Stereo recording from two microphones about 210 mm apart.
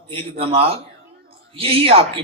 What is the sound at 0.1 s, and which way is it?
Speech, 25° right (ahead or behind).